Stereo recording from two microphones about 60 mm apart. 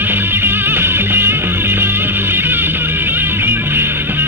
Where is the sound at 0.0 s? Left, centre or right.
Right.